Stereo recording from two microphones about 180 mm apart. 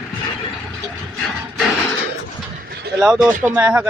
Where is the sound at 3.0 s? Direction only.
Centre (ahead or behind).